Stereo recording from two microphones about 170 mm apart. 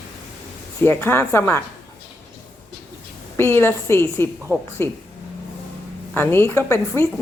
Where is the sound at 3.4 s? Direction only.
15° left (ahead or behind).